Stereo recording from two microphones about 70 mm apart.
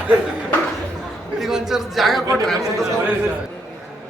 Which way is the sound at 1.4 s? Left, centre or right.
Centre.